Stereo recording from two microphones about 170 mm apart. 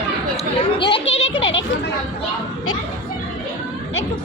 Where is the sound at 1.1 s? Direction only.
90° left.